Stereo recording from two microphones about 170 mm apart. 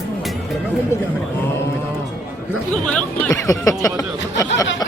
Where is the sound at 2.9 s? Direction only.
5° left (ahead or behind).